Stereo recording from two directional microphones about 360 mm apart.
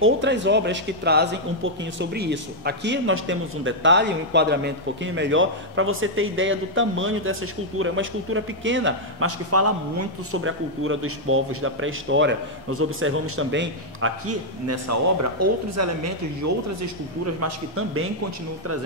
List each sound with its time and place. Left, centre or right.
0.0 s a man's voice: right
17.4 s a man's voice: right